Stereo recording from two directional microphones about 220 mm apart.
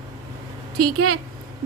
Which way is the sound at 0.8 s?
80° right.